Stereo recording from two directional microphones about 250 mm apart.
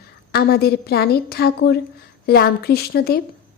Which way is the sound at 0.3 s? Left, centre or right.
Left.